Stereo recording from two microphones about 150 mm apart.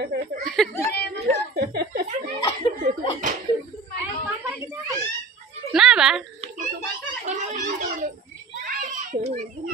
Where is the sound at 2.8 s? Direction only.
65° right (ahead or behind).